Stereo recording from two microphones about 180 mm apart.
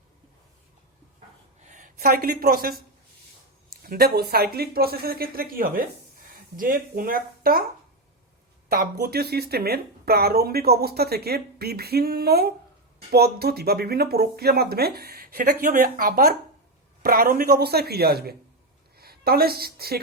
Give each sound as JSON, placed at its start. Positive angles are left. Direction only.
{"t": 1.6, "sound": "speech", "side_deg": -45}
{"t": 3.8, "sound": "speech", "side_deg": -60}
{"t": 8.7, "sound": "a woman's voice", "side_deg": -60}